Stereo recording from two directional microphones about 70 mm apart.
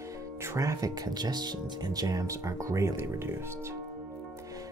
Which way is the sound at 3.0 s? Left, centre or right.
Right.